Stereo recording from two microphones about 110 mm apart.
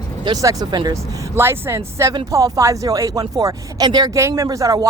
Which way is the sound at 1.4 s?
20° right (ahead or behind).